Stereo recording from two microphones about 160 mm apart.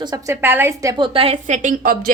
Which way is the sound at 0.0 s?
25° right (ahead or behind).